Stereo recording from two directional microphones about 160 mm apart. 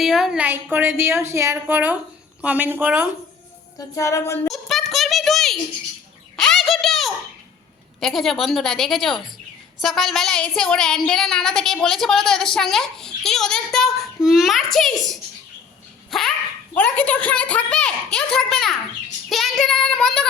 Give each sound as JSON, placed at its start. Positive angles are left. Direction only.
{"t": 0.0, "sound": "a woman's voice", "side_deg": 0}
{"t": 3.8, "sound": "female singing", "side_deg": 20}
{"t": 4.5, "sound": "a sound", "side_deg": 0}
{"t": 8.0, "sound": "a woman's voice", "side_deg": 0}
{"t": 16.0, "sound": "dog", "side_deg": 0}
{"t": 16.7, "sound": "a woman's voice", "side_deg": 10}